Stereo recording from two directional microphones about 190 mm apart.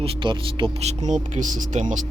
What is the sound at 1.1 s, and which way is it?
Speech, 40° right (ahead or behind).